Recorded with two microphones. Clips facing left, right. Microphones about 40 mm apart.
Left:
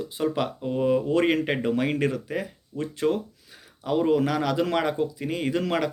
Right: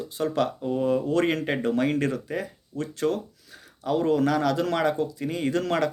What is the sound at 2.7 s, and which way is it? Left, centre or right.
Speech, centre.